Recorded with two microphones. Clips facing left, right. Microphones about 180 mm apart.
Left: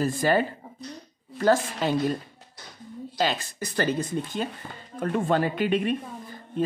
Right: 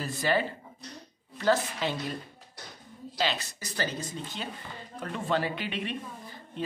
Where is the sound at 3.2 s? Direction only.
50° left (ahead or behind).